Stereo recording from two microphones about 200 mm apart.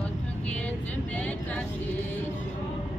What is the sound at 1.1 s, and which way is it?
Speech, 5° left (ahead or behind).